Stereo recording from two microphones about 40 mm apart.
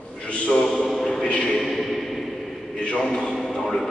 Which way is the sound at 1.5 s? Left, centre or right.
Centre.